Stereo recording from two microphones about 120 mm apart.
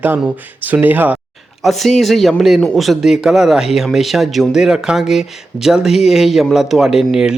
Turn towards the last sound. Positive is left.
turn(degrees=-5)  # may be behind; listen again after turning